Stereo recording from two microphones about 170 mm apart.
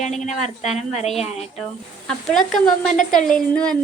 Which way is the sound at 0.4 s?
Centre (ahead or behind).